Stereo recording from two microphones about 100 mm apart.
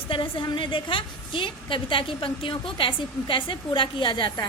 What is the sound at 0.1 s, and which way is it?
A woman's voice, 55° left (ahead or behind).